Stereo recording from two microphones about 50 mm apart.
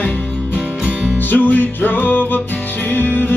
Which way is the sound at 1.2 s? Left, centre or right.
Left.